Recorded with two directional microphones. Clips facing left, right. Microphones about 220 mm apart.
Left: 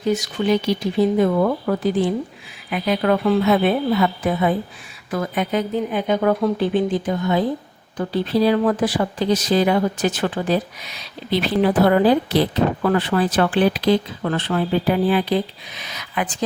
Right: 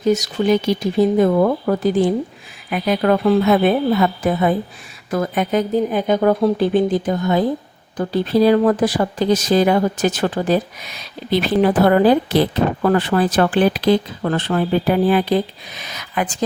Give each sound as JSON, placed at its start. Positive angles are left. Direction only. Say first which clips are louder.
{"t": 0.1, "sound": "speech", "louder": "right 3 dB", "side_deg": -40}